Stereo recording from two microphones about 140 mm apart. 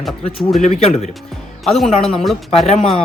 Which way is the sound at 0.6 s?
55° left (ahead or behind).